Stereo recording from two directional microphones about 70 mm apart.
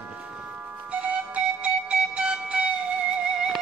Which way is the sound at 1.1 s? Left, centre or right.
Centre.